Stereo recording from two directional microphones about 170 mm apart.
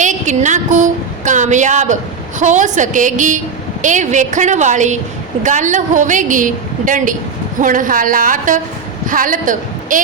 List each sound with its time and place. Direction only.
0.0 s a woman's voice: 45° right (ahead or behind)